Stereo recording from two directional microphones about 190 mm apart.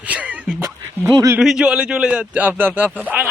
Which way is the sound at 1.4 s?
5° right (ahead or behind).